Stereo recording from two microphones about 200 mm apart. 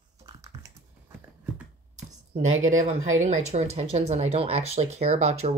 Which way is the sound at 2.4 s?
85° right.